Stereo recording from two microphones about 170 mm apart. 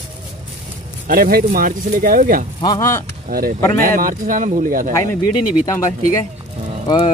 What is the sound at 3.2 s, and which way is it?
Speech, 60° right (ahead or behind).